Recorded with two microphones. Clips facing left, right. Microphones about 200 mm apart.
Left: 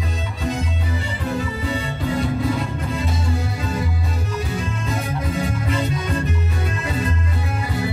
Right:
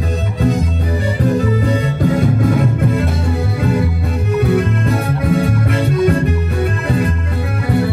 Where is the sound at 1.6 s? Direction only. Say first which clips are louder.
Right 8 dB; 40° right (ahead or behind); by 6.3 s 60° right (ahead or behind).